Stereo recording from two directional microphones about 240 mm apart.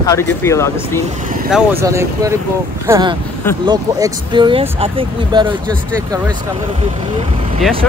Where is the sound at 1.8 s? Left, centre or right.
Centre.